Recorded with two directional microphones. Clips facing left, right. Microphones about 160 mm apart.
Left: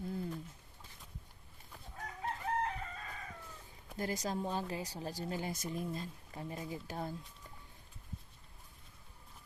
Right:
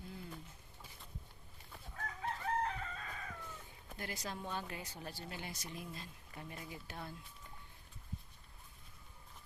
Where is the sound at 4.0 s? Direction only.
40° left (ahead or behind).